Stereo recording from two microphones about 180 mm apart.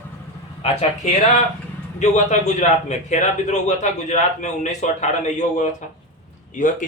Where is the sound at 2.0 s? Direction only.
40° left (ahead or behind).